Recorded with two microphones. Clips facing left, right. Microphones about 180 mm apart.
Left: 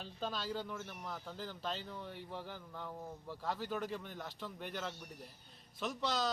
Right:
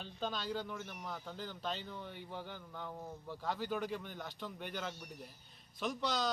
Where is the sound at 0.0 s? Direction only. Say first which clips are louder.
Right 1 dB; centre (ahead or behind).